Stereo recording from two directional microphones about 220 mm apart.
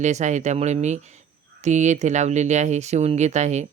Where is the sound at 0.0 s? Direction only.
30° right (ahead or behind).